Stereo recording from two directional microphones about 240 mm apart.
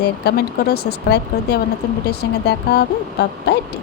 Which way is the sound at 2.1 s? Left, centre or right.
Left.